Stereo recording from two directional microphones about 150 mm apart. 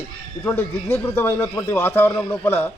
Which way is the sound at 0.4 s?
15° left (ahead or behind).